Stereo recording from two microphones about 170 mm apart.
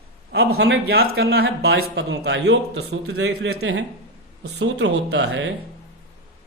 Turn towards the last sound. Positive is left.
turn(degrees=-90)